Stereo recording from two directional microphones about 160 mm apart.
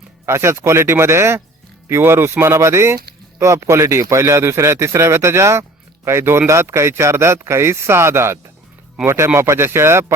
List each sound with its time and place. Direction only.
0.3 s speech: 15° right (ahead or behind)